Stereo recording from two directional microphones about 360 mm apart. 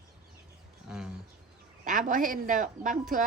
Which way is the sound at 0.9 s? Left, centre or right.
Centre.